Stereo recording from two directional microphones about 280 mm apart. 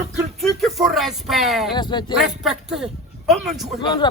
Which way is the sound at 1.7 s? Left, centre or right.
Centre.